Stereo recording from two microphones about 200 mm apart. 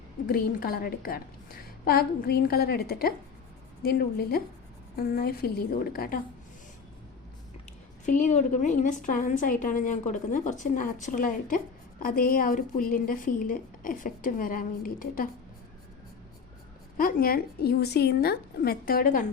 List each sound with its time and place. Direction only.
0.3 s a woman's voice: 50° left (ahead or behind)
8.0 s a woman's voice: 40° left (ahead or behind)
17.0 s a woman's voice: 45° left (ahead or behind)